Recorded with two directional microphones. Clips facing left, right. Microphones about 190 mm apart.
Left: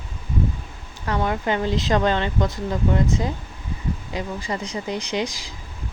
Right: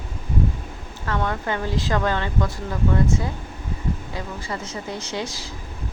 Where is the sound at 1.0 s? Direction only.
15° left (ahead or behind).